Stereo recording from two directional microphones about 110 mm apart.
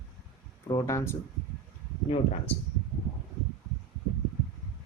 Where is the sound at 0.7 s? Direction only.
30° left (ahead or behind).